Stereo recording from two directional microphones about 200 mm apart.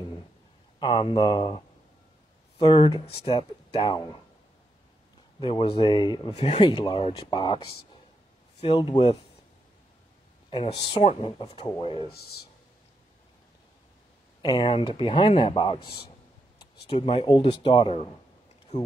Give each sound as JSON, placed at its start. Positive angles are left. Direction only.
{"t": 0.7, "sound": "speech", "side_deg": 25}
{"t": 2.6, "sound": "speech", "side_deg": 25}
{"t": 5.4, "sound": "speech", "side_deg": 25}
{"t": 10.5, "sound": "speech", "side_deg": 30}
{"t": 14.4, "sound": "speech", "side_deg": 25}